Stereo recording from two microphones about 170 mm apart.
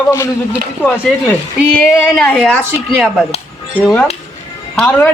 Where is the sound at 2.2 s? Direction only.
5° left (ahead or behind).